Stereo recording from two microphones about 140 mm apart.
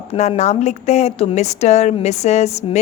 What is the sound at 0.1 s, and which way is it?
A woman's voice, 50° left (ahead or behind).